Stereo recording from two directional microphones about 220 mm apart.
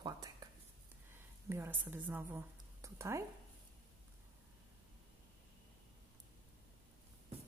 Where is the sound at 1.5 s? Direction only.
10° right (ahead or behind).